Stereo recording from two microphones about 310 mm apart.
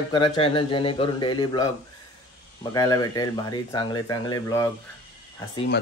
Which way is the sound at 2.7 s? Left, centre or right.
Centre.